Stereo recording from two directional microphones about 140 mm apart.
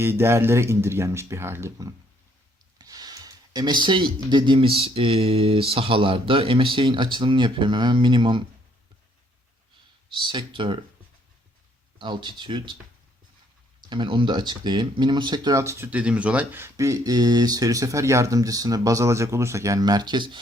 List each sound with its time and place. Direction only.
0.0 s speech: 15° right (ahead or behind); by 8.4 s 35° right (ahead or behind)
10.2 s speech: 35° right (ahead or behind)
11.9 s speech: 35° right (ahead or behind)
13.9 s speech: 35° right (ahead or behind)